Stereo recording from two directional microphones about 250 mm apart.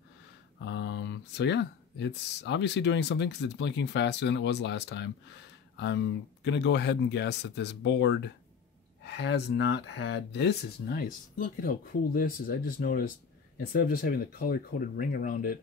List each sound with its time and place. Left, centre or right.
0.6 s speech: left